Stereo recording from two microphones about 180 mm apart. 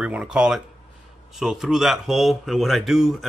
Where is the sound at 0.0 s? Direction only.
5° right (ahead or behind).